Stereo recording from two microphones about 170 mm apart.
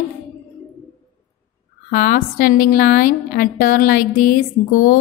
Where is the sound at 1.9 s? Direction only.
55° left (ahead or behind).